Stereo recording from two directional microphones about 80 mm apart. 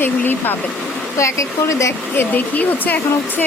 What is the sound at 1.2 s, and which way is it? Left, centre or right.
Speech, left.